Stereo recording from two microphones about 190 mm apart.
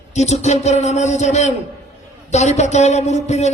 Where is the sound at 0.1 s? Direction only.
35° left (ahead or behind).